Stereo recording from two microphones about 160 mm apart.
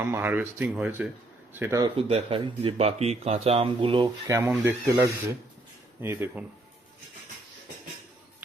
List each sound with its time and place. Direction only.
0.0 s speech: 15° right (ahead or behind)
1.8 s speech: 35° right (ahead or behind)
4.3 s speech: 20° right (ahead or behind)